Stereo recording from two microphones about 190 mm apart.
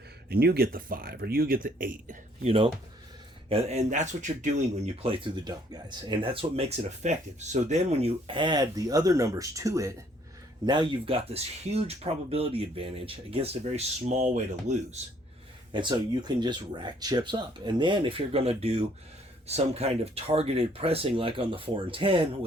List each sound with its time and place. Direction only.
0.3 s speech: 55° right (ahead or behind)
5.0 s speech: 25° right (ahead or behind)
15.7 s speech: 25° right (ahead or behind)